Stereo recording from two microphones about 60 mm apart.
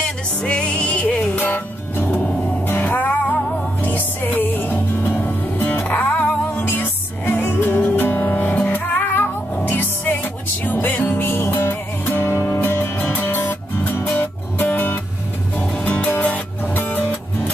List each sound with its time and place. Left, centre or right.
0.0 s music: centre
3.8 s music: left